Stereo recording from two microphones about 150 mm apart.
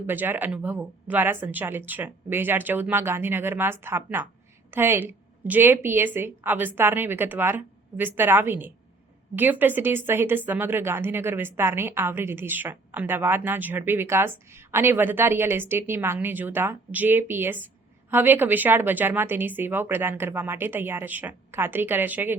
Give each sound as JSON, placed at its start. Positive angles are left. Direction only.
{"t": 0.1, "sound": "a woman's voice", "side_deg": -15}